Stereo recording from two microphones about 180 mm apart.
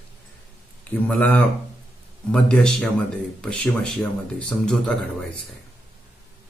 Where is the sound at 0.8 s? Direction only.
10° left (ahead or behind).